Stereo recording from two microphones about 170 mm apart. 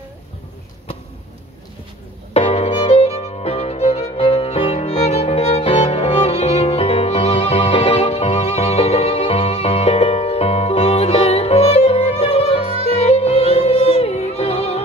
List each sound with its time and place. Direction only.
2.3 s music: 40° left (ahead or behind)